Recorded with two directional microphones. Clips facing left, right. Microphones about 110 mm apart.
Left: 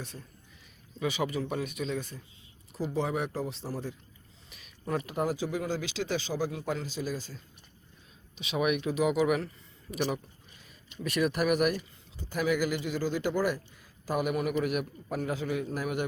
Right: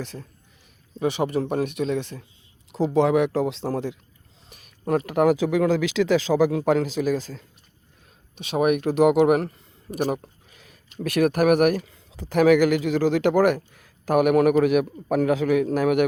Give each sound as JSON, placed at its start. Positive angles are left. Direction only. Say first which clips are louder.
{"t": 0.0, "sound": "speech", "louder": "right 9 dB", "side_deg": -80}
{"t": 0.9, "sound": "speech", "louder": "right 8 dB", "side_deg": -55}
{"t": 2.9, "sound": "speech", "louder": "right 12 dB", "side_deg": -90}
{"t": 4.5, "sound": "speech", "louder": "right 9 dB", "side_deg": -50}
{"t": 8.4, "sound": "speech", "louder": "right 8 dB", "side_deg": -50}
{"t": 10.5, "sound": "a sound", "louder": "right 4 dB", "side_deg": -80}
{"t": 10.9, "sound": "speech", "louder": "right 8 dB", "side_deg": -55}